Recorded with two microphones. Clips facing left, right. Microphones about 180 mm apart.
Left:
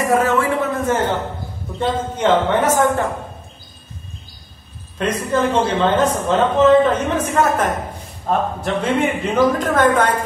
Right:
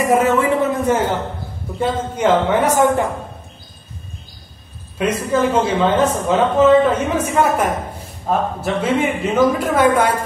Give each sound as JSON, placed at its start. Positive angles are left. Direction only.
{"t": 0.0, "sound": "a woman's voice", "side_deg": -15}
{"t": 0.4, "sound": "a sound", "side_deg": -15}
{"t": 1.8, "sound": "speech", "side_deg": -10}
{"t": 4.9, "sound": "a woman's voice", "side_deg": -5}